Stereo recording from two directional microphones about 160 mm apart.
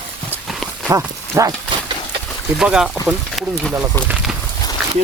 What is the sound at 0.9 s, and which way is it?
Speech, 20° right (ahead or behind).